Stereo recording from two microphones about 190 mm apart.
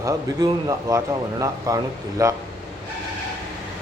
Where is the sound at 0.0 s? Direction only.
20° right (ahead or behind).